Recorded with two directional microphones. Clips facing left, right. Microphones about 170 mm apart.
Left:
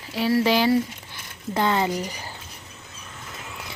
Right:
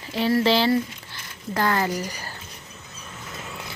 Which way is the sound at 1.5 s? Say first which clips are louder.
Left 1 dB; 20° left (ahead or behind).